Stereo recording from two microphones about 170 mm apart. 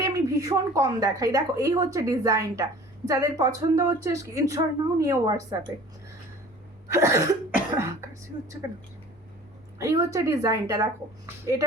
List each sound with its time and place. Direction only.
0.0 s a woman's voice: 20° right (ahead or behind)
6.9 s cough: 15° right (ahead or behind)
9.7 s cough: 15° right (ahead or behind)